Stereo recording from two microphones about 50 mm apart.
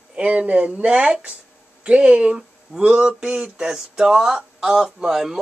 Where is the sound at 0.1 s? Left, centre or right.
Right.